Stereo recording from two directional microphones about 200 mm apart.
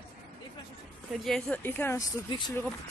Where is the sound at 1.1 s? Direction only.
Centre (ahead or behind).